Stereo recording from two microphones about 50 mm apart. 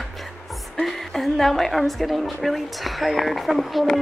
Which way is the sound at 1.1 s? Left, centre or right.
Centre.